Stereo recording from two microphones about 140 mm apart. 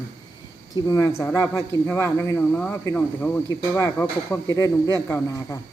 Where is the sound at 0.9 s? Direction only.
20° left (ahead or behind).